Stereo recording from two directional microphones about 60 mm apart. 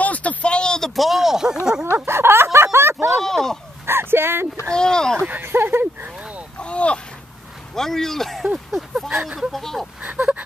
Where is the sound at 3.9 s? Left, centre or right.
Right.